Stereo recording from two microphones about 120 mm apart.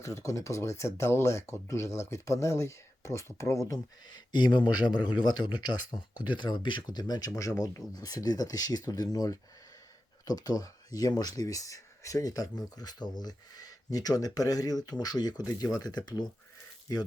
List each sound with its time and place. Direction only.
0.0 s speech: 25° left (ahead or behind)